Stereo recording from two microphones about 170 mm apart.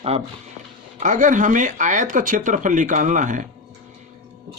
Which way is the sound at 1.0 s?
50° right (ahead or behind).